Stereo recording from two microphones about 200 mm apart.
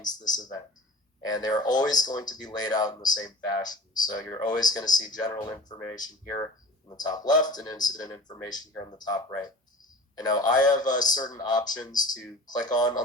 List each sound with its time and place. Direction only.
0.0 s speech: 20° left (ahead or behind)